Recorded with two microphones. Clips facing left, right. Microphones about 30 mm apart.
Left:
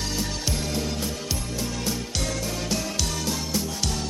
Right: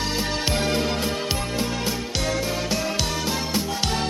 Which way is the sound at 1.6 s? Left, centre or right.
Right.